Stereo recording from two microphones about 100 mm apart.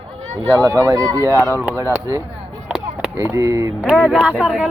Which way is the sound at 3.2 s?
30° right (ahead or behind).